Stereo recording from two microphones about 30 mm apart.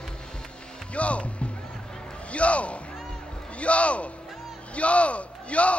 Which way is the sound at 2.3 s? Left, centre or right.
Left.